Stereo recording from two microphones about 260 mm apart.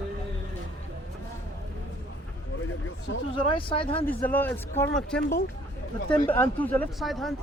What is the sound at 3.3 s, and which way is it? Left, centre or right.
Speech, centre.